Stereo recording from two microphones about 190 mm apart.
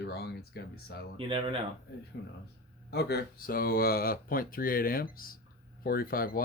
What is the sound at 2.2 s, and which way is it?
Speech, 55° left (ahead or behind).